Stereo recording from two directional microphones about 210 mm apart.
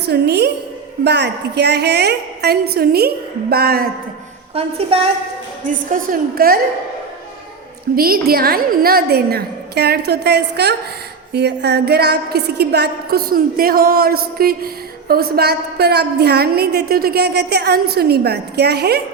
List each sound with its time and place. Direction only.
0.0 s a woman's voice: 50° right (ahead or behind)
4.6 s a woman's voice: 30° right (ahead or behind)
5.6 s a woman's voice: 40° right (ahead or behind)
7.9 s a woman's voice: 45° right (ahead or behind)